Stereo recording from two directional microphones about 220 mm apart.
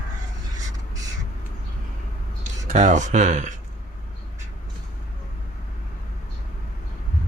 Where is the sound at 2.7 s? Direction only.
35° right (ahead or behind).